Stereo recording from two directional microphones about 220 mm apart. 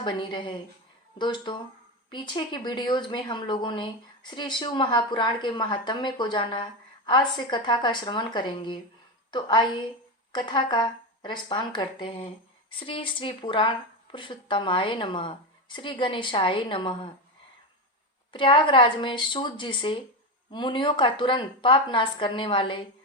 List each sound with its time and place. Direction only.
0.0 s a woman's voice: 20° left (ahead or behind)
18.3 s a woman's voice: 25° left (ahead or behind)